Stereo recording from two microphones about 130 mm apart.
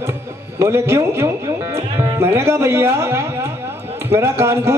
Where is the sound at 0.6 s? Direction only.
20° right (ahead or behind).